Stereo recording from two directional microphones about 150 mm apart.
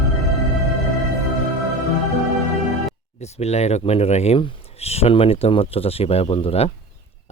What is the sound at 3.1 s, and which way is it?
Speech, 45° left (ahead or behind).